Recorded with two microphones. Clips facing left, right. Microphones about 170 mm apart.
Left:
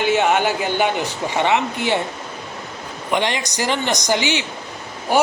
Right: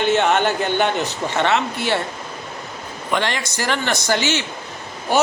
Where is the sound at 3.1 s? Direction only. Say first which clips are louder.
Left 1 dB; 15° left (ahead or behind).